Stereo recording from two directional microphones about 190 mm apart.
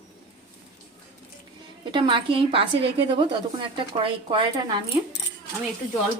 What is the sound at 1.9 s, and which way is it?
A woman's voice, 25° right (ahead or behind).